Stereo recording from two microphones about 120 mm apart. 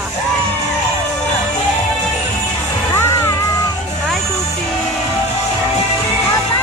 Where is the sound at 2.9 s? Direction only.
25° left (ahead or behind).